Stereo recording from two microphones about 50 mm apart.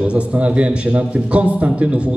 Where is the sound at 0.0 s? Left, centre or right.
Right.